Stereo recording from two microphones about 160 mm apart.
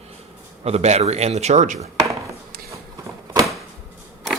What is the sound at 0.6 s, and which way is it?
Speech, 40° right (ahead or behind).